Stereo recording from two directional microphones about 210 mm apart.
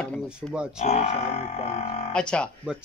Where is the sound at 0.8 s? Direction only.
30° left (ahead or behind).